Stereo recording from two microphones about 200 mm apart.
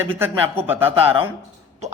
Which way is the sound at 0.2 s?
10° right (ahead or behind).